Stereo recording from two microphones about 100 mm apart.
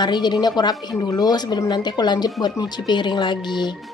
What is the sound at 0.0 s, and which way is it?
A woman's voice, 45° left (ahead or behind).